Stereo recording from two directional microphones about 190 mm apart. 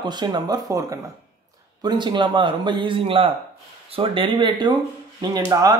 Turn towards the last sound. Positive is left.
turn(degrees=-20)  # may be behind; listen again after turning